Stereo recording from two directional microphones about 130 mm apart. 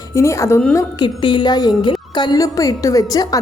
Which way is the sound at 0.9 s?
35° left (ahead or behind).